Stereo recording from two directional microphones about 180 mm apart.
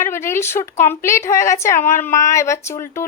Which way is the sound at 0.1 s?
15° left (ahead or behind).